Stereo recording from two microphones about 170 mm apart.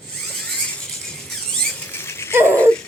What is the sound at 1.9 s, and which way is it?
Rattle, 15° left (ahead or behind).